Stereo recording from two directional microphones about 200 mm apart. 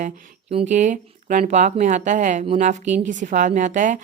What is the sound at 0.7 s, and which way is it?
Speech, 40° right (ahead or behind).